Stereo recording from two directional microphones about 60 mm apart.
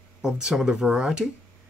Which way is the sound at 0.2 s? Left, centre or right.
Centre.